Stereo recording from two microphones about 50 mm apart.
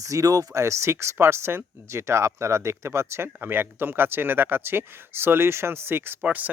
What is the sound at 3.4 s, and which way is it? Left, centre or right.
Speech, right.